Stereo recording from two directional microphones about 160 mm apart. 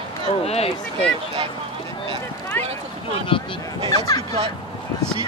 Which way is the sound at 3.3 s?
35° left (ahead or behind).